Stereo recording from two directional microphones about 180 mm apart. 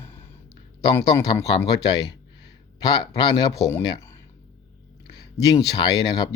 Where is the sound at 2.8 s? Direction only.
20° left (ahead or behind).